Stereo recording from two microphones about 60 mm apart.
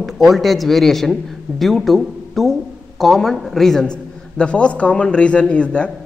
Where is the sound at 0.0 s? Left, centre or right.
Centre.